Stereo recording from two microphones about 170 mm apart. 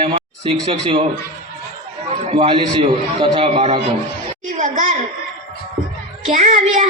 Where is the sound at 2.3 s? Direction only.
30° right (ahead or behind).